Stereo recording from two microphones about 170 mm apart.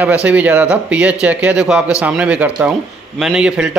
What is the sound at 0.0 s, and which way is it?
A man's voice, 10° right (ahead or behind).